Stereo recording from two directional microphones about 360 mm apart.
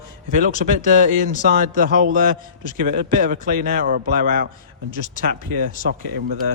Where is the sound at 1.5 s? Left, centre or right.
Right.